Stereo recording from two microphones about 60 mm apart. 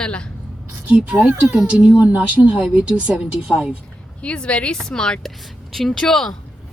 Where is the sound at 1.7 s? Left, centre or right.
Centre.